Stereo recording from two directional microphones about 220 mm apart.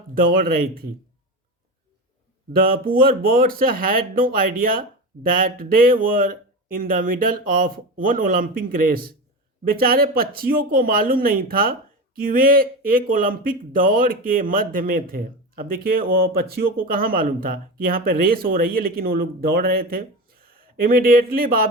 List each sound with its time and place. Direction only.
0.1 s speech: 40° right (ahead or behind)
2.6 s speech: 40° right (ahead or behind)